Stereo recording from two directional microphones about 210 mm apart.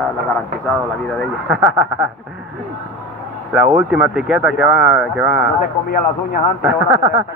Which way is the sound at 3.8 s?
5° right (ahead or behind).